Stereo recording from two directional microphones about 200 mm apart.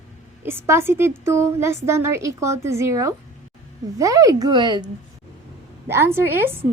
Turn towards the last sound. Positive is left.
turn(degrees=-10)  # may be behind; listen again after turning